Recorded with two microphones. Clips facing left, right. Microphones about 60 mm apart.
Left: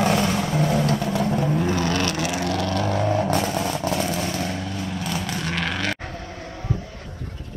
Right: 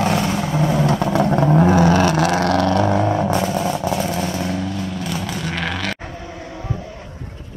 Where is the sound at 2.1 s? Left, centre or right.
Right.